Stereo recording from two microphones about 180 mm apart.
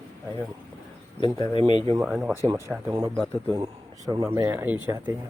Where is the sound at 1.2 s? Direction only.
25° left (ahead or behind).